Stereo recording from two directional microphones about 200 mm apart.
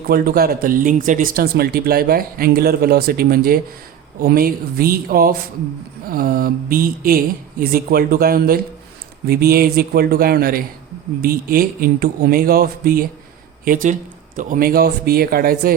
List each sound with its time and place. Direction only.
0.1 s speech: 50° right (ahead or behind)